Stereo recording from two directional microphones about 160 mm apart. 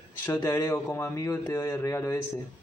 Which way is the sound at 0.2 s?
15° left (ahead or behind).